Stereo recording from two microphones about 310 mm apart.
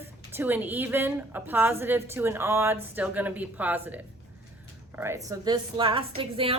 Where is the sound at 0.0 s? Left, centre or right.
Centre.